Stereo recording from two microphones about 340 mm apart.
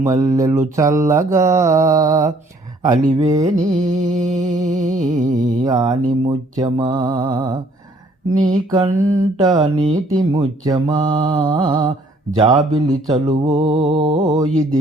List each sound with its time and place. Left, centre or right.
0.0 s mantra: centre
3.7 s music: right
5.6 s mantra: centre